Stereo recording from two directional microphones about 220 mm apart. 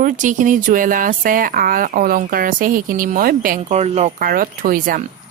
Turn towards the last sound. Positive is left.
turn(degrees=-40)  # may be behind; listen again after turning